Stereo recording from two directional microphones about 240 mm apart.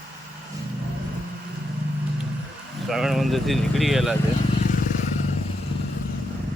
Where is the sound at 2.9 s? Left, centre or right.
Centre.